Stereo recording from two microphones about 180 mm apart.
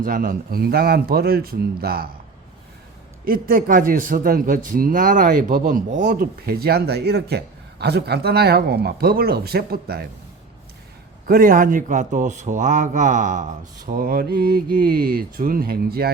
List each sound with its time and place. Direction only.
0.0 s a man's voice: 50° right (ahead or behind)
3.2 s a man's voice: 55° right (ahead or behind)
11.3 s speech: 50° right (ahead or behind)